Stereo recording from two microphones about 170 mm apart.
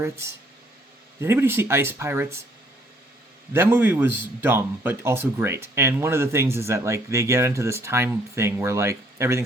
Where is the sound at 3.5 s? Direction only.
15° right (ahead or behind).